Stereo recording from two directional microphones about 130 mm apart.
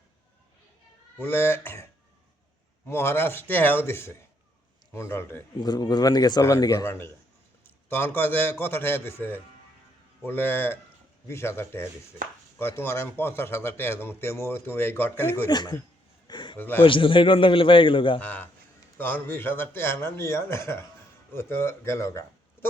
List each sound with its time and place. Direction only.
1.2 s a man's voice: 20° left (ahead or behind)
5.5 s a man's voice: 35° left (ahead or behind); by 15.4 s 15° left (ahead or behind)
15.4 s a man's voice: 35° left (ahead or behind)
16.2 s a sound: 35° left (ahead or behind)
16.6 s a man's voice: 15° left (ahead or behind)
16.8 s a man's voice: 40° left (ahead or behind)
18.2 s a man's voice: 10° left (ahead or behind)